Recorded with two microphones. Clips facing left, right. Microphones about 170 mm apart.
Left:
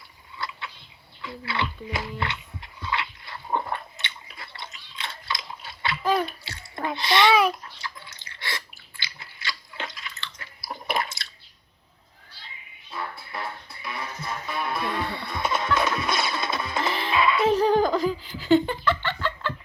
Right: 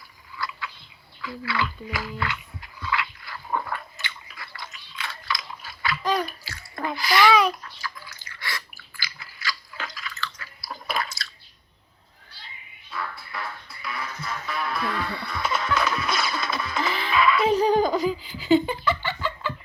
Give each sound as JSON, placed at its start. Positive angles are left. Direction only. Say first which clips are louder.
{"t": 0.3, "sound": "a sound", "louder": "right 2 dB", "side_deg": 25}
{"t": 1.2, "sound": "dog", "louder": "right 2 dB", "side_deg": 25}
{"t": 6.1, "sound": "bathtub", "louder": "left 1 dB", "side_deg": 25}
{"t": 7.6, "sound": "drip", "louder": "right 1 dB", "side_deg": 25}
{"t": 12.9, "sound": "music", "louder": "even", "side_deg": 25}
{"t": 17.5, "sound": "a sound", "louder": "even", "side_deg": 0}